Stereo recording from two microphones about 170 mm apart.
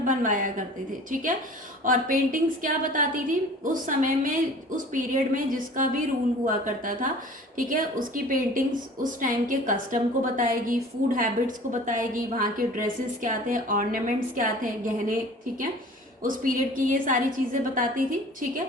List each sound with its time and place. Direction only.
0.0 s a woman's voice: 50° right (ahead or behind)
16.2 s a woman's voice: 55° right (ahead or behind)